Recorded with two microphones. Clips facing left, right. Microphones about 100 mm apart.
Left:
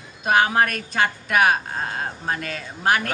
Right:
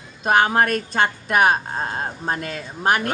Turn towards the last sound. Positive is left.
turn(degrees=-30)  # may be behind; listen again after turning